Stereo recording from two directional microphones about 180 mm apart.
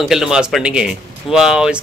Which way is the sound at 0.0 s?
Centre (ahead or behind).